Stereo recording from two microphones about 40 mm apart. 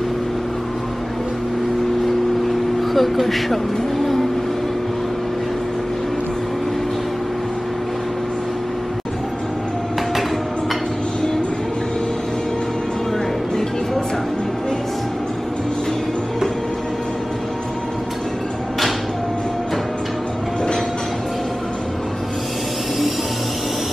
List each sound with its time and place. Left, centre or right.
2.9 s speech: centre